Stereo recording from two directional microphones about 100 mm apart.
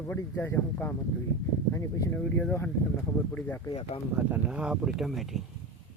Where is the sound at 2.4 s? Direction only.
15° left (ahead or behind).